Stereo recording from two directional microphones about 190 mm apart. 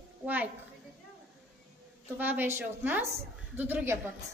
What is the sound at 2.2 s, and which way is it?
A woman's voice, 10° right (ahead or behind).